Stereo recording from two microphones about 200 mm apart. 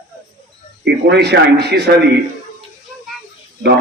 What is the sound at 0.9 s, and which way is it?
A man's voice, 55° right (ahead or behind).